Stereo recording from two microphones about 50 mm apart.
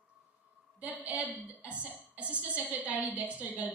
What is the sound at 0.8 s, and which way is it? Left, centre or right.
A woman's voice, right.